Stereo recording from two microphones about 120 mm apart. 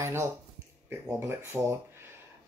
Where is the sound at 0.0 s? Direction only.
20° right (ahead or behind).